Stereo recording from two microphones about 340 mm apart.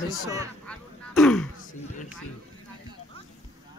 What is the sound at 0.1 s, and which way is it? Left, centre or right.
Speech, centre.